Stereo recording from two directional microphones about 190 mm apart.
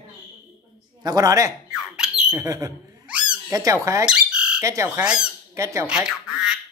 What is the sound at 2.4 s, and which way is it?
Speech, 20° right (ahead or behind).